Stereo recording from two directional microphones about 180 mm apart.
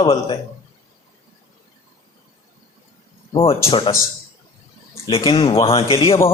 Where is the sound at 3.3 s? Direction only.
30° left (ahead or behind).